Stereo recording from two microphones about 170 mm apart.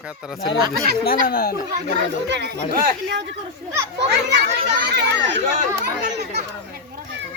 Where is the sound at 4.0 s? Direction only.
90° right.